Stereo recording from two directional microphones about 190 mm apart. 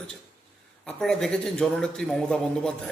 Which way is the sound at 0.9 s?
5° left (ahead or behind).